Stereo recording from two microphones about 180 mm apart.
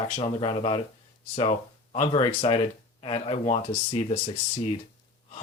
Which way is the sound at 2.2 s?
30° left (ahead or behind).